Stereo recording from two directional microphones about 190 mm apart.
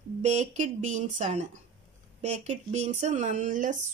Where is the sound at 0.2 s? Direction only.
40° right (ahead or behind).